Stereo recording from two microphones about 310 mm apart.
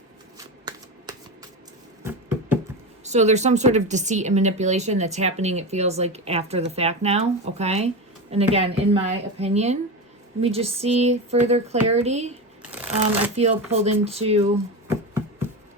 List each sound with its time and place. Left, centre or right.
0.3 s shuffling cards: centre
2.0 s music: centre
3.0 s speech: right
12.7 s speech: centre
13.3 s speech: centre
14.8 s a sound: centre